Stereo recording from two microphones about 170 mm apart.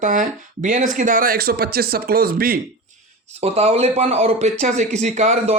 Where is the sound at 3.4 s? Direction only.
40° right (ahead or behind).